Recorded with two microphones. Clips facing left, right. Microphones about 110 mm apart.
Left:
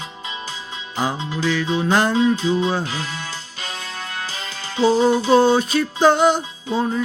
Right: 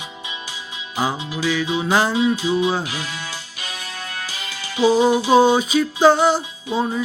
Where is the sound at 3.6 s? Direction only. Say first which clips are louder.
Left 3 dB; 25° left (ahead or behind).